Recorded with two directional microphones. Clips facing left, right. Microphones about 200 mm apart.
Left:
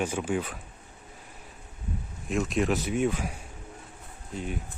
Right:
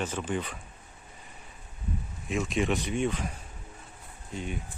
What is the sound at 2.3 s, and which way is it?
Speech, centre (ahead or behind).